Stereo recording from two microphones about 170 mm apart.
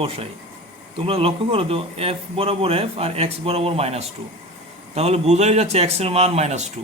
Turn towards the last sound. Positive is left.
turn(degrees=-40)  # may be behind; listen again after turning